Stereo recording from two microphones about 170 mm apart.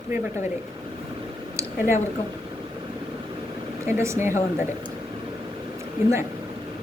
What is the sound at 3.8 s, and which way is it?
Speech, 15° right (ahead or behind).